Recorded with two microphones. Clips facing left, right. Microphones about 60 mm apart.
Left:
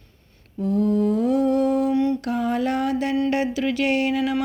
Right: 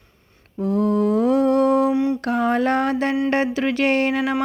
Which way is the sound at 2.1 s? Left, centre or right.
Right.